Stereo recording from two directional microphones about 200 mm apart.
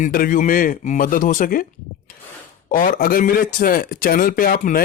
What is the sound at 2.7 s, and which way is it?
A man's voice, 45° left (ahead or behind).